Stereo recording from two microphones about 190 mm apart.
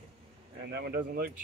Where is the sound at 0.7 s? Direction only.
55° right (ahead or behind).